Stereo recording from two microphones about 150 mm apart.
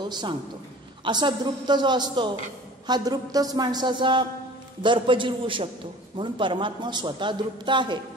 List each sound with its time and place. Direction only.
0.0 s a man's voice: 30° right (ahead or behind)